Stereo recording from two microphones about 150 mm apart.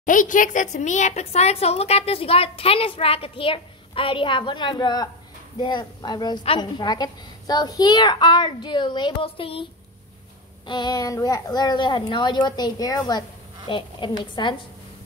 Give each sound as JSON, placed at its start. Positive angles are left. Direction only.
{"t": 0.0, "sound": "a child's voice", "side_deg": 60}
{"t": 10.7, "sound": "a child's voice", "side_deg": 30}